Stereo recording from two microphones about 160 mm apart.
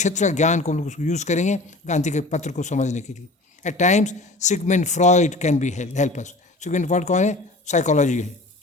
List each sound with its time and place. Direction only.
0.0 s speech: 45° left (ahead or behind)